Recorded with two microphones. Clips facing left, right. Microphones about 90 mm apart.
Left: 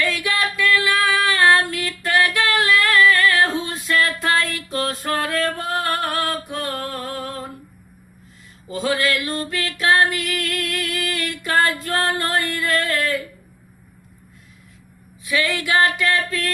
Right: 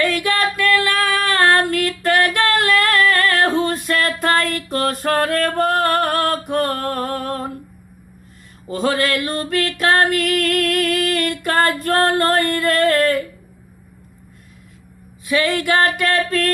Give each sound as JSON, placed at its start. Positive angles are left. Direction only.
{"t": 0.0, "sound": "female singing", "side_deg": -45}
{"t": 8.7, "sound": "female singing", "side_deg": -50}
{"t": 15.3, "sound": "female singing", "side_deg": -45}